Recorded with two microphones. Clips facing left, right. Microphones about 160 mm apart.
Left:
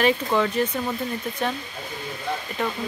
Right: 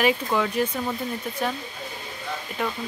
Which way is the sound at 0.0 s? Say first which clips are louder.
Left 2 dB; 10° right (ahead or behind).